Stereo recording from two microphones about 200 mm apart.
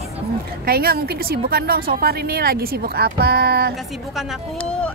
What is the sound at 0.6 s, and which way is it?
A woman's voice, 50° right (ahead or behind).